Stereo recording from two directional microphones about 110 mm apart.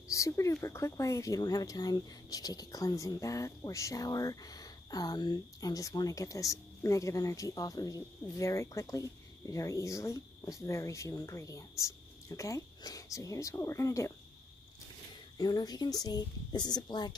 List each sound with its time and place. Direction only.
0.1 s speech: 30° left (ahead or behind)
15.3 s speech: 35° left (ahead or behind)